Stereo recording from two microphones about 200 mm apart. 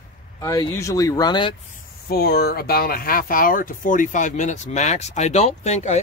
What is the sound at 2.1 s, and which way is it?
Speech, 50° left (ahead or behind).